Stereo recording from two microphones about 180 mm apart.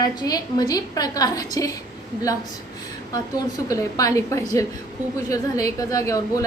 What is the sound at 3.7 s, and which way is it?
A woman's voice, 20° left (ahead or behind).